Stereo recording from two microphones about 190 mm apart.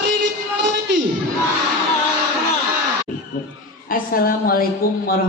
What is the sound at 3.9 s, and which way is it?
Speech, 50° left (ahead or behind).